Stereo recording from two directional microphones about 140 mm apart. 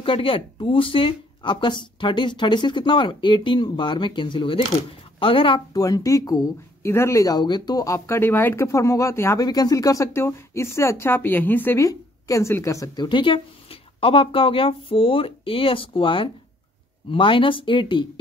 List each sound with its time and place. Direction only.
0.0 s speech: 40° left (ahead or behind)
5.7 s speech: 25° left (ahead or behind)